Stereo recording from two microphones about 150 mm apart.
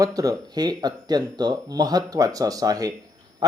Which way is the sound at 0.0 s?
25° right (ahead or behind).